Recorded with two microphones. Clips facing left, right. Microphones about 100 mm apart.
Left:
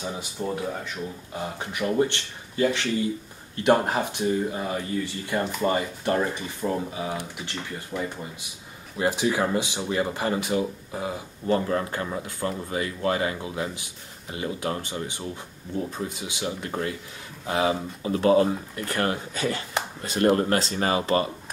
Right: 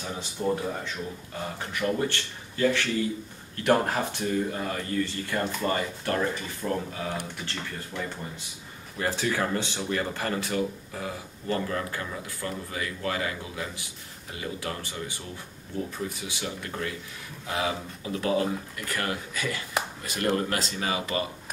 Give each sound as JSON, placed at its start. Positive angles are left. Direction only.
{"t": 0.4, "sound": "speech", "side_deg": 10}